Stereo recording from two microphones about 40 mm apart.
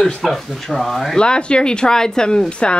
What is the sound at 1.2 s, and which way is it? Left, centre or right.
Speech, left.